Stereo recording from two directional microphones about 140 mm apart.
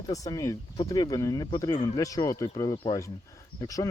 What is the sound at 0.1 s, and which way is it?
Speech, 25° left (ahead or behind).